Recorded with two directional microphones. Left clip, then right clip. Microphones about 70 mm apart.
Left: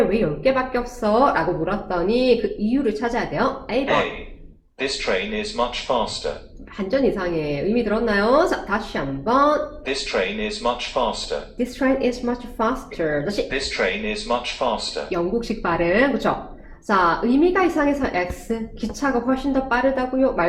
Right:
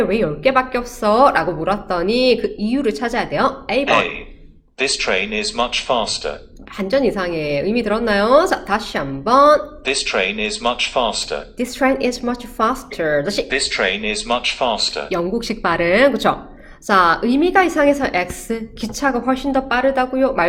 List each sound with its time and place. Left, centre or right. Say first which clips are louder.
0.1 s a woman's voice: right 4 dB; right
4.8 s speech: right 5 dB; right
6.7 s a woman's voice: right 3 dB; right
9.8 s speech: right 5 dB; right
11.5 s a woman's voice: right 4 dB; centre
13.5 s speech: right 5 dB; right
15.1 s a woman's voice: right 2 dB; right